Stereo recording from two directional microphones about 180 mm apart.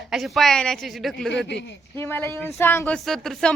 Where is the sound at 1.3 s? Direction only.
75° left (ahead or behind).